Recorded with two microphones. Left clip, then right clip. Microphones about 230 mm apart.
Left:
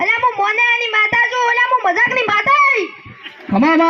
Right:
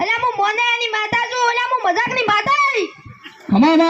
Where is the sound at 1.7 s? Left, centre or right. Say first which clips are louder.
Left 3 dB; right.